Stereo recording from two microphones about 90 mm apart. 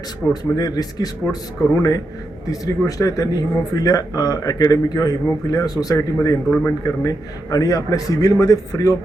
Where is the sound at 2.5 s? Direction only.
40° left (ahead or behind).